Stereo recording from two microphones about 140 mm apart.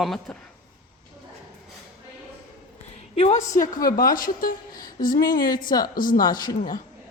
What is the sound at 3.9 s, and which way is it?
A woman's voice, 90° left.